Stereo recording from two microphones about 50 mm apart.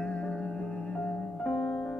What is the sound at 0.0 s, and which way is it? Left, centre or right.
Music, left.